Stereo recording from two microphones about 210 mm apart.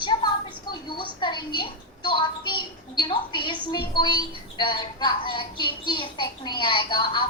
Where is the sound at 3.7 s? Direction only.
20° left (ahead or behind).